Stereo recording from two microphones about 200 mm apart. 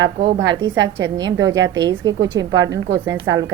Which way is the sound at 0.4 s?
70° right (ahead or behind).